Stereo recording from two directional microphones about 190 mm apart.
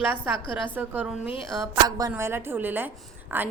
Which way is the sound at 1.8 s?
20° right (ahead or behind).